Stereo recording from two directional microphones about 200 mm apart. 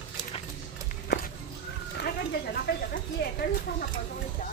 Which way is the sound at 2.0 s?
50° left (ahead or behind).